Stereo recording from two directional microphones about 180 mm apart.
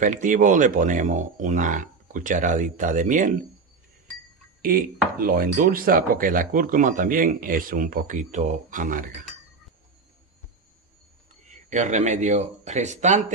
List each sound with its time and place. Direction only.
0.0 s speech: 45° right (ahead or behind)
4.6 s speech: 50° right (ahead or behind)
11.4 s speech: 40° right (ahead or behind)